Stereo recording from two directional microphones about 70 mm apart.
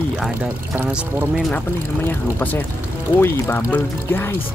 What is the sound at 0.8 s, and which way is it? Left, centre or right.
Speech, centre.